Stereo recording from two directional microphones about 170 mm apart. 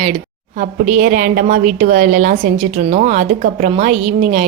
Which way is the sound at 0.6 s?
55° right (ahead or behind).